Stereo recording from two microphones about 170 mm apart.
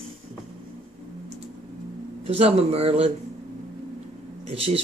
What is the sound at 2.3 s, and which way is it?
Speech, 35° right (ahead or behind).